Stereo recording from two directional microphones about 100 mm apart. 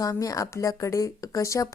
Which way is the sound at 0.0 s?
35° left (ahead or behind).